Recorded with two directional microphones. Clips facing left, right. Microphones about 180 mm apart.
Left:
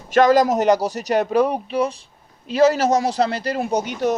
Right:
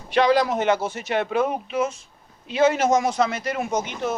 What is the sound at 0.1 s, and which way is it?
Speech, 45° left (ahead or behind).